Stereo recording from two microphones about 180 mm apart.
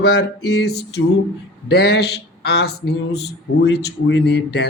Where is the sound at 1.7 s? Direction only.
65° left (ahead or behind).